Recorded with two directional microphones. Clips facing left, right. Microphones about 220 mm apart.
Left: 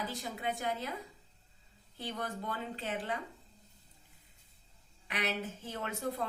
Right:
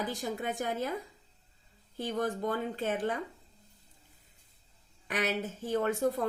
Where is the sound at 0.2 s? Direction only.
45° right (ahead or behind).